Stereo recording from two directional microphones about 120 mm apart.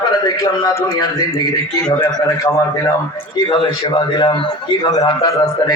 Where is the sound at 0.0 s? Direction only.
35° left (ahead or behind).